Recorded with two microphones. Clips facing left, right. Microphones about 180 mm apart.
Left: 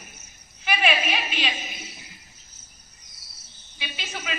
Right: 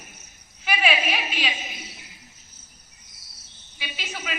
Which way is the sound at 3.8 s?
5° right (ahead or behind).